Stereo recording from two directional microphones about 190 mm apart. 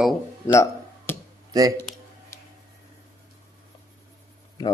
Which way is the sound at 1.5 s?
20° right (ahead or behind).